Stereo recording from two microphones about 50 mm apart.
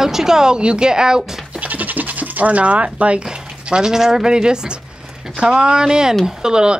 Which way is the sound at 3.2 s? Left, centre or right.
Centre.